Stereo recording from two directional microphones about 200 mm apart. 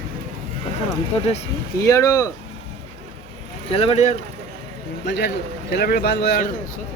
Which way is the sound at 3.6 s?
30° left (ahead or behind).